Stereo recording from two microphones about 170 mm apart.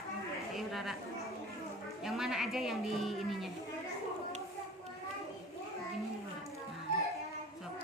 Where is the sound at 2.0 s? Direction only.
Centre (ahead or behind).